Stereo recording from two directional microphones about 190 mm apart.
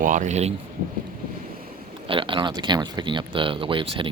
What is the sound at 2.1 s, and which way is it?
Speech, 25° right (ahead or behind).